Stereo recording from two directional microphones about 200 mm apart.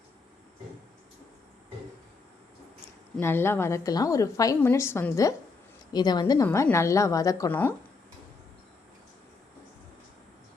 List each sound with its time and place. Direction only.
3.2 s a woman's voice: 10° left (ahead or behind)